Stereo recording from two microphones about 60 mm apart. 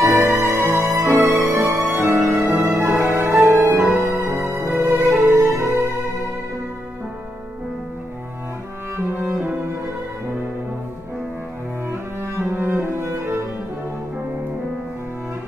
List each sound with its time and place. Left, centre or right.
0.0 s music: right
1.1 s music: right
8.9 s music: right
11.9 s music: right
12.5 s cello: right